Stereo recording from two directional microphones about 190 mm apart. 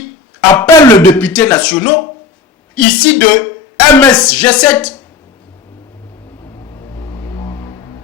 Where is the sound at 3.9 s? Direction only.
5° left (ahead or behind).